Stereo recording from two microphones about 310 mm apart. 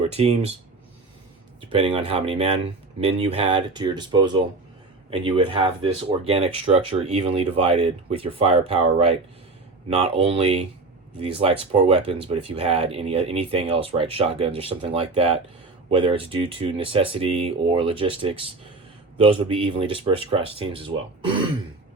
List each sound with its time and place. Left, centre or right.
0.1 s speech: centre
1.7 s speech: centre